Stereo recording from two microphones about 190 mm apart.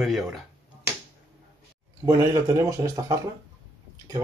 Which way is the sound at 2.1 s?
15° right (ahead or behind).